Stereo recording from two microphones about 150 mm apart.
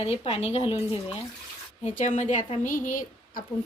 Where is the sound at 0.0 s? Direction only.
45° left (ahead or behind).